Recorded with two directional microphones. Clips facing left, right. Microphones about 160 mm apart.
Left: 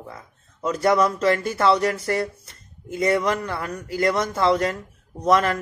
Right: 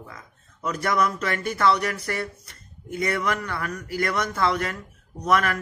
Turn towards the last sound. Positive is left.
turn(degrees=30)  # may be behind; listen again after turning